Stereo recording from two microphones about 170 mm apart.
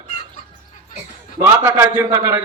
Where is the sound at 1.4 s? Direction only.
15° right (ahead or behind).